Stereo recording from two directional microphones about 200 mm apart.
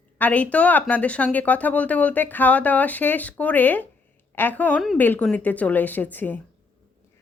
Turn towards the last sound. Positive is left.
turn(degrees=10)  # may be behind; listen again after turning